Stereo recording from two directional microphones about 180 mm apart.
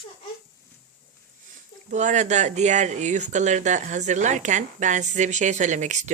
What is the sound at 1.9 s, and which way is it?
Speech, 40° right (ahead or behind).